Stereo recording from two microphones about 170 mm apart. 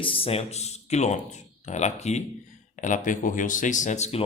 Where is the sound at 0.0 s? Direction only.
30° left (ahead or behind).